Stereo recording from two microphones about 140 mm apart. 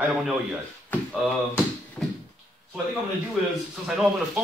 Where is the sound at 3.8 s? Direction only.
5° right (ahead or behind).